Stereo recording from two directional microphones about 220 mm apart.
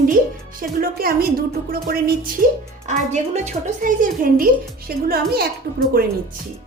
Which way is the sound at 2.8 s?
30° right (ahead or behind).